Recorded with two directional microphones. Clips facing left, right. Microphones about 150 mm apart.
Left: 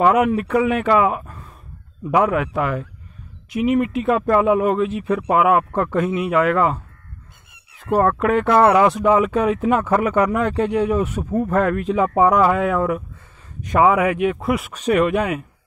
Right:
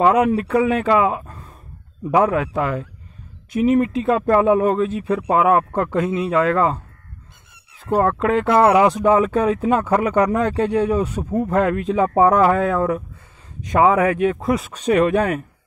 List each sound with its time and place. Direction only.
0.0 s speech: 30° right (ahead or behind)
7.8 s speech: 25° right (ahead or behind)
8.9 s speech: 35° right (ahead or behind)